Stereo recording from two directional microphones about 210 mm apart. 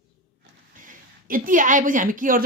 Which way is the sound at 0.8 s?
40° right (ahead or behind).